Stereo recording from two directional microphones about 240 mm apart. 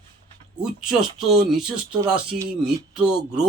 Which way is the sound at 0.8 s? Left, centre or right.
Centre.